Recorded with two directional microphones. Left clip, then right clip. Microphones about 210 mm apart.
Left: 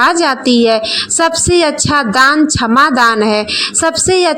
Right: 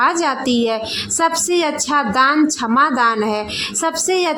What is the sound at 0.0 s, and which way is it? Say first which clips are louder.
A woman's voice: left 6 dB; 20° left (ahead or behind).